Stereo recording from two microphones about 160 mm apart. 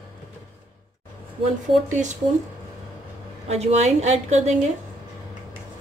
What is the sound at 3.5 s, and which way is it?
Speech, 40° right (ahead or behind).